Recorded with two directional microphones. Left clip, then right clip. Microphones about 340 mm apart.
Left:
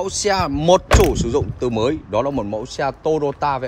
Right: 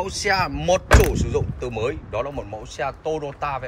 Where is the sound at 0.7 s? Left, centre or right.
Centre.